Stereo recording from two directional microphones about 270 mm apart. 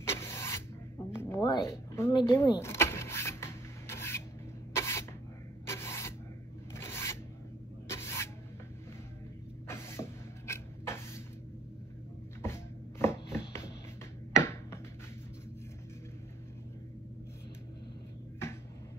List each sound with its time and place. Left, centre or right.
0.1 s rub: centre
1.1 s power windows: centre
4.7 s sneeze: centre
5.7 s a sound: centre
6.7 s rub: centre
7.9 s spray: centre
9.7 s music: centre
12.4 s a sound: centre
14.4 s a sound: centre